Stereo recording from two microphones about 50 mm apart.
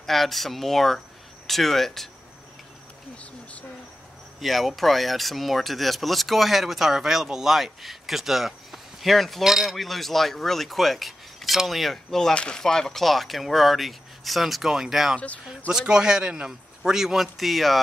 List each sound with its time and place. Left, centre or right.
0.0 s speech: centre
4.4 s speech: centre
15.1 s speech: left
15.7 s a man's voice: centre